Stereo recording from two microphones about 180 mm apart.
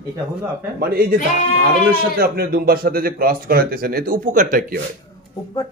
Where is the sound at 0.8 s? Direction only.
60° right (ahead or behind).